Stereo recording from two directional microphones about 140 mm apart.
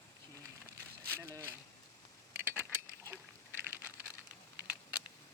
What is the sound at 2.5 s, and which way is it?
Mechanisms, 15° right (ahead or behind).